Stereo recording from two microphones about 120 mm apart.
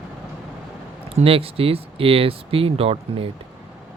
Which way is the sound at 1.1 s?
50° right (ahead or behind).